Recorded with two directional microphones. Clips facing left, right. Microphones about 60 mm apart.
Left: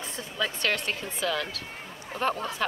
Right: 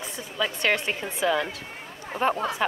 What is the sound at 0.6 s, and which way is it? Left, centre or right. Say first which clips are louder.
Speech: right 4 dB; right.